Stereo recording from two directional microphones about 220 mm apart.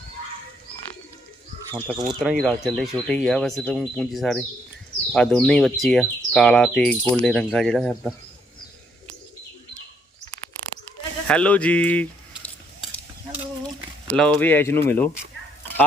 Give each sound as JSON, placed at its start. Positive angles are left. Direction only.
{"t": 2.0, "sound": "speech", "side_deg": 0}
{"t": 11.3, "sound": "speech", "side_deg": 5}
{"t": 14.1, "sound": "speech", "side_deg": 5}